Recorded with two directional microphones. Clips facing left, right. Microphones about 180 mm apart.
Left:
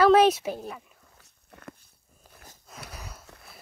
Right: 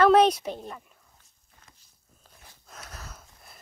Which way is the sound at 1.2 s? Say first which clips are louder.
Left 15 dB; 70° left (ahead or behind).